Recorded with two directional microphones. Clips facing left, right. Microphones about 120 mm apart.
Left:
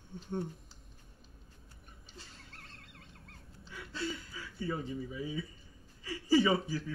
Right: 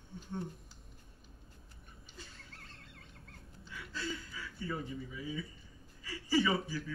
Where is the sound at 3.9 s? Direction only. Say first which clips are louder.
Left 2 dB; 25° left (ahead or behind).